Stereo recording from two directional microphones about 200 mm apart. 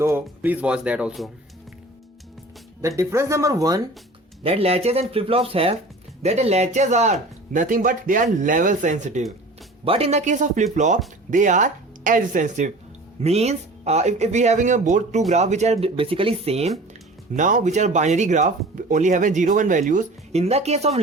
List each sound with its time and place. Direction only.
0.0 s speech: 10° right (ahead or behind)
2.8 s speech: 15° right (ahead or behind)
4.4 s speech: 30° right (ahead or behind)